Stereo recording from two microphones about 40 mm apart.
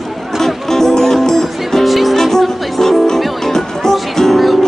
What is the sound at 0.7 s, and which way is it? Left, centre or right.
Music, centre.